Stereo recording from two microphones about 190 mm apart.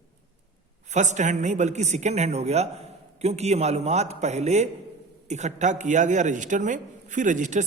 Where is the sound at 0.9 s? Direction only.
40° right (ahead or behind).